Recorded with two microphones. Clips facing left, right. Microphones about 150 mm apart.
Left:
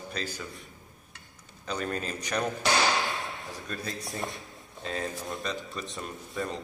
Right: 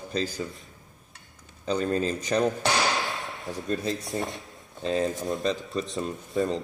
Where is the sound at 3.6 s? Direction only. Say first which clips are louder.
Right 10 dB; 25° right (ahead or behind).